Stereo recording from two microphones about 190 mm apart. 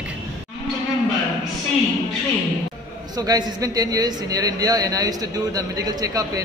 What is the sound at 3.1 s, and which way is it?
A man's voice, 20° right (ahead or behind).